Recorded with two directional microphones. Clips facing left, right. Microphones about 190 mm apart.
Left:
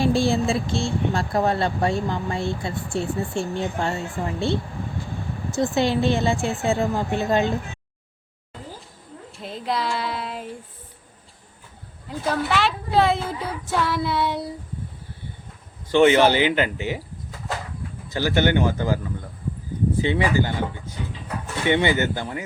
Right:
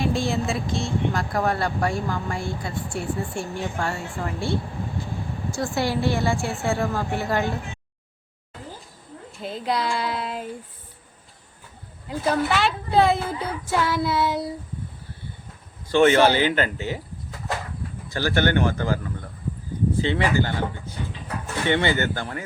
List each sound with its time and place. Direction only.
0.0 s speech: 30° left (ahead or behind)
9.4 s a woman's voice: centre (ahead or behind)
12.0 s a woman's voice: centre (ahead or behind)
15.9 s speech: 15° left (ahead or behind)
18.1 s speech: 15° left (ahead or behind)
20.0 s speech: 15° left (ahead or behind)